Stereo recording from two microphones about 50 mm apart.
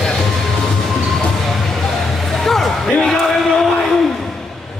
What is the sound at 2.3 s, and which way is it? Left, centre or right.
Basketball bounce, centre.